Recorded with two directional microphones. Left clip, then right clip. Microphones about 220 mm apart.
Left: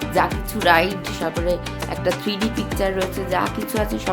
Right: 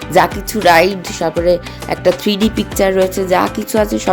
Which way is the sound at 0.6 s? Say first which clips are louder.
Right 7 dB; 25° right (ahead or behind).